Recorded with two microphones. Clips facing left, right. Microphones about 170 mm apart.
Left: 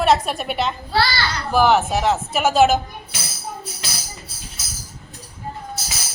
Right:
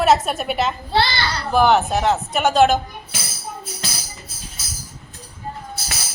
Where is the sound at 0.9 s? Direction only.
25° right (ahead or behind).